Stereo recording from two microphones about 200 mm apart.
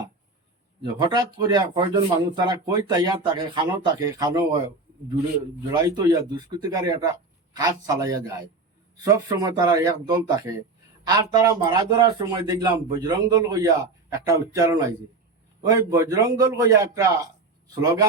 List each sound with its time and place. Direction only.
0.9 s speech: 20° right (ahead or behind)
5.7 s speech: 20° right (ahead or behind)